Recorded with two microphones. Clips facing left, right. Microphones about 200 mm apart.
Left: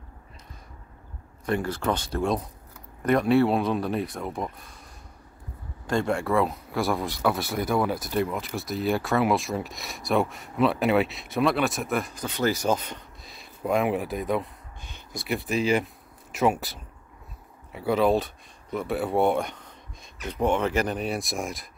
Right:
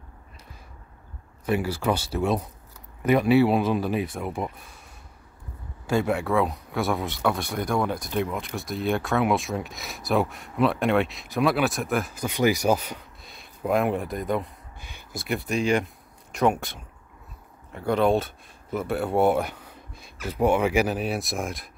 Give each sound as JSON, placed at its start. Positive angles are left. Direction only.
{"t": 1.4, "sound": "speech", "side_deg": -5}
{"t": 5.9, "sound": "speech", "side_deg": -5}
{"t": 12.3, "sound": "speech", "side_deg": -10}
{"t": 14.9, "sound": "a sound", "side_deg": -10}
{"t": 15.2, "sound": "speech", "side_deg": 0}